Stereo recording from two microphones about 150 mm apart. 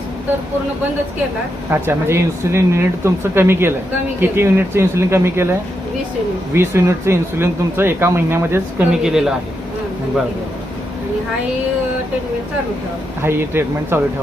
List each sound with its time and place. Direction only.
1.7 s speech: 15° right (ahead or behind)
9.0 s a man's voice: 5° right (ahead or behind)
13.2 s speech: 15° right (ahead or behind)